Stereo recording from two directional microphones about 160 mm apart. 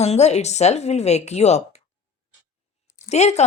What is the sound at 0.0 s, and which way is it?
Speech, 45° left (ahead or behind).